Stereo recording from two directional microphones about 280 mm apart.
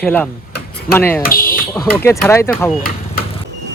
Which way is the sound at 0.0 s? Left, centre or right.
Centre.